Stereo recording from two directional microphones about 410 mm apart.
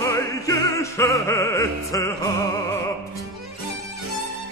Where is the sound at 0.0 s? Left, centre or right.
Centre.